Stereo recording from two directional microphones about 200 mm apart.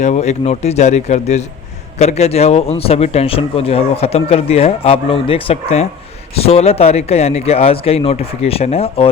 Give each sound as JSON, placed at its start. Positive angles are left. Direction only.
{"t": 0.0, "sound": "speech", "side_deg": 35}